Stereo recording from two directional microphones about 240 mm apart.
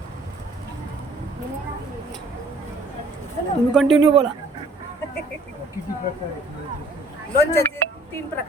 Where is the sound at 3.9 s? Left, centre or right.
Right.